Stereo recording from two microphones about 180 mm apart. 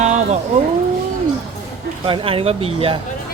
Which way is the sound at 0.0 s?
40° right (ahead or behind).